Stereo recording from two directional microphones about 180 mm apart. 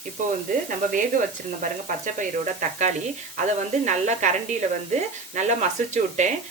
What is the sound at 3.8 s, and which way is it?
Speech, 40° right (ahead or behind).